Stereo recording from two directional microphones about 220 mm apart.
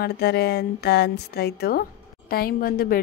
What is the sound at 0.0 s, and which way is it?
A woman's voice, 45° left (ahead or behind).